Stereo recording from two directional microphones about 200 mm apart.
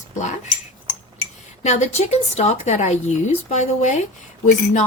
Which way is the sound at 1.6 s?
35° left (ahead or behind).